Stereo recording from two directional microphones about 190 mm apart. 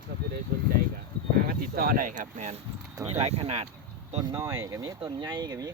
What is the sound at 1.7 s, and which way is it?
Speech, 50° right (ahead or behind).